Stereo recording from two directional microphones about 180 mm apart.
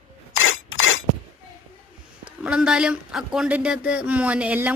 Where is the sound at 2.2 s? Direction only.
5° right (ahead or behind).